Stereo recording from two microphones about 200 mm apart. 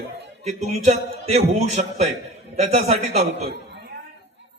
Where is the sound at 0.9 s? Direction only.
30° right (ahead or behind).